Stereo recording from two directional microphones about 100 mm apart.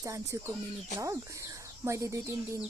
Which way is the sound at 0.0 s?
30° right (ahead or behind).